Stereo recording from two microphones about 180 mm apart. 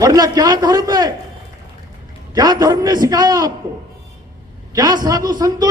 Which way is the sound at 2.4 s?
20° right (ahead or behind).